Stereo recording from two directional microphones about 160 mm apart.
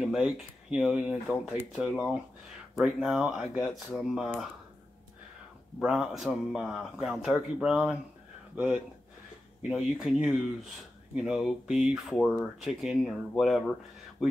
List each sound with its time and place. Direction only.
0.0 s speech: 5° right (ahead or behind)
5.8 s speech: 5° right (ahead or behind)
9.6 s speech: 5° right (ahead or behind)